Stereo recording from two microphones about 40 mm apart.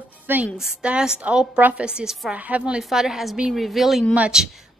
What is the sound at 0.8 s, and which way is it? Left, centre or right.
A woman's voice, right.